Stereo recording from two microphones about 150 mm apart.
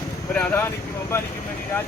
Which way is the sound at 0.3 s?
15° left (ahead or behind).